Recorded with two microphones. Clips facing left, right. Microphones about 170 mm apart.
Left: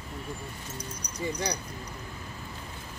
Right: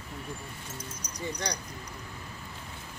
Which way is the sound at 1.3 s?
Centre (ahead or behind).